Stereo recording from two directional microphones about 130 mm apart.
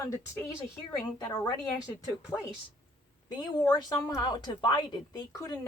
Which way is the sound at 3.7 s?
25° left (ahead or behind).